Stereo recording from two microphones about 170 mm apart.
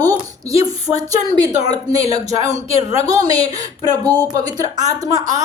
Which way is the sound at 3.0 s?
20° right (ahead or behind).